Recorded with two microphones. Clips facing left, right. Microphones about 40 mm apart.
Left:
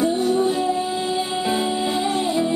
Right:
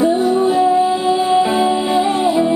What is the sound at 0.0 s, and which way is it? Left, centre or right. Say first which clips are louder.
Music: right 5 dB; centre.